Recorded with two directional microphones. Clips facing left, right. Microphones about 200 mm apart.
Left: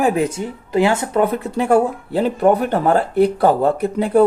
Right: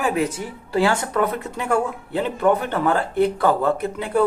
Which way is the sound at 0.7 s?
20° left (ahead or behind).